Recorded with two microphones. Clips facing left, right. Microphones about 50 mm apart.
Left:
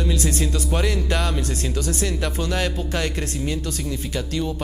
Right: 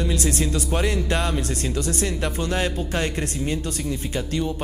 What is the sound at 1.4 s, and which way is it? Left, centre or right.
Speech, right.